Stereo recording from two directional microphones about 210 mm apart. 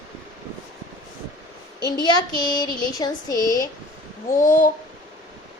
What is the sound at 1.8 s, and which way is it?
A child's voice, 20° left (ahead or behind).